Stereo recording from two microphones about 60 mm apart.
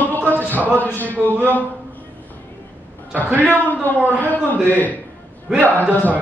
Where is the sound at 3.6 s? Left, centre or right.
Left.